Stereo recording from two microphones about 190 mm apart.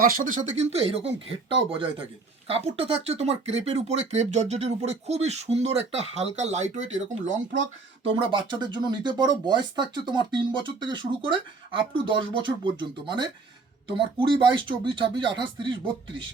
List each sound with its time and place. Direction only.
0.0 s speech: 50° right (ahead or behind)
7.3 s speech: 80° right
8.3 s speech: 25° right (ahead or behind)